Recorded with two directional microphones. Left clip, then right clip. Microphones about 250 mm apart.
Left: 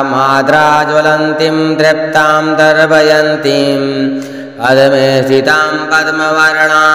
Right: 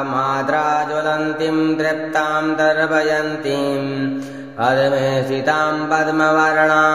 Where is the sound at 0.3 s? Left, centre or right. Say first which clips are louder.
Left 11 dB; left.